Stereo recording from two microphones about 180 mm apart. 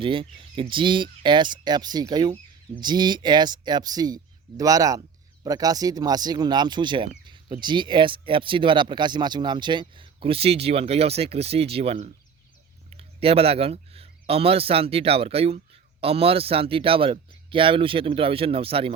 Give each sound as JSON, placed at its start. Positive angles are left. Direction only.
{"t": 0.0, "sound": "speech", "side_deg": -30}